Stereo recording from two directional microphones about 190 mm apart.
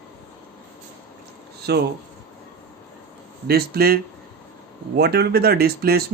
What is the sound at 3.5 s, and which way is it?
Speech, 55° right (ahead or behind).